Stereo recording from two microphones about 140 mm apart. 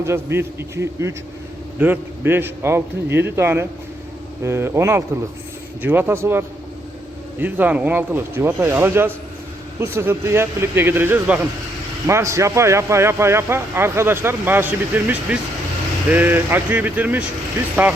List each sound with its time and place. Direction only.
0.0 s a man's voice: 20° right (ahead or behind)